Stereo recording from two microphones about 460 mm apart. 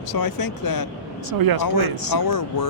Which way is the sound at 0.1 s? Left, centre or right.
Left.